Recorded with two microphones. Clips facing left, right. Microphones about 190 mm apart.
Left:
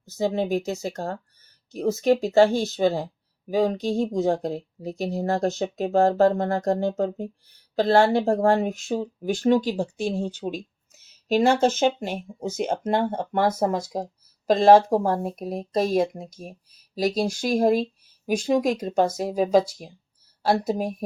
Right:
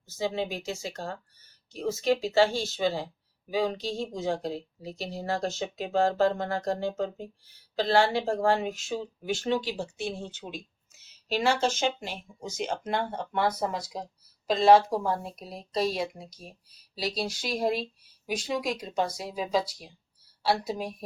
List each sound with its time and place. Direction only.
0.2 s speech: 45° left (ahead or behind)
12.5 s speech: 55° left (ahead or behind)